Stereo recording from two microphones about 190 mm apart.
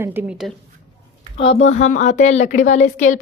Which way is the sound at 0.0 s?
10° right (ahead or behind).